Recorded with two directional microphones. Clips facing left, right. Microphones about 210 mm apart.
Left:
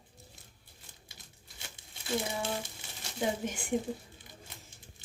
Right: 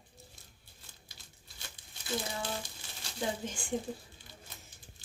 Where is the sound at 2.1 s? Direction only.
25° left (ahead or behind).